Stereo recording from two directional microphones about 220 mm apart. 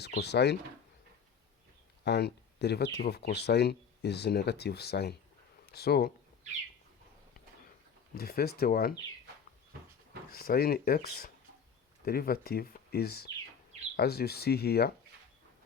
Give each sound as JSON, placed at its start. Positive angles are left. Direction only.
{"t": 0.0, "sound": "speech", "side_deg": 50}
{"t": 2.0, "sound": "speech", "side_deg": 50}
{"t": 6.5, "sound": "bird", "side_deg": -30}
{"t": 8.1, "sound": "speech", "side_deg": 45}
{"t": 10.3, "sound": "speech", "side_deg": 45}